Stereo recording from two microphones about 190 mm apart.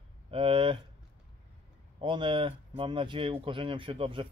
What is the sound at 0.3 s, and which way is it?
Speech, 30° right (ahead or behind).